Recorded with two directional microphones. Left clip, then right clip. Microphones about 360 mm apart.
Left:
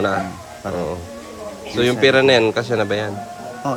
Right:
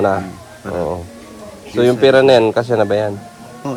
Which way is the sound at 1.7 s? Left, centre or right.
Centre.